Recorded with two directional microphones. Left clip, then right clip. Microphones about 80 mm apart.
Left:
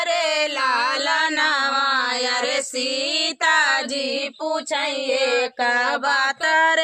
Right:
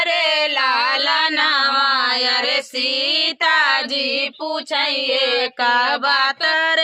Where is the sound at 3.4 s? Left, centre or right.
Left.